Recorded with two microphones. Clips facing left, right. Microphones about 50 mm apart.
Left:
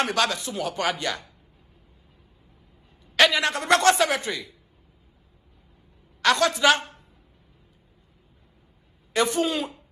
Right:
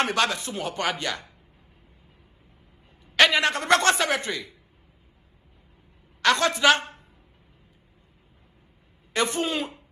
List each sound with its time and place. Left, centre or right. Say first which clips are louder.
0.0 s a woman's voice: even; right
3.2 s a woman's voice: even; right
6.3 s a woman's voice: even; right
9.1 s a woman's voice: left 2 dB; right